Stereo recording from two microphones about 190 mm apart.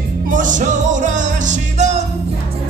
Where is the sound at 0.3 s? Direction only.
40° right (ahead or behind).